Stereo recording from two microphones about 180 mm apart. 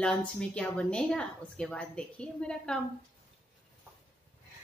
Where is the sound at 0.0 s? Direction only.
5° left (ahead or behind).